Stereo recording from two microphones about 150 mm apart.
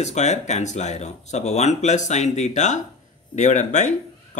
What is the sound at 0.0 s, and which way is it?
Speech, 50° left (ahead or behind).